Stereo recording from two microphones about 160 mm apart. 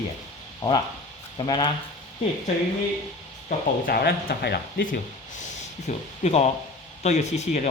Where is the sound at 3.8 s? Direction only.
70° left (ahead or behind).